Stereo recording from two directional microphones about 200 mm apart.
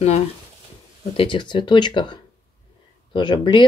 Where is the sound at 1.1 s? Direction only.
25° left (ahead or behind).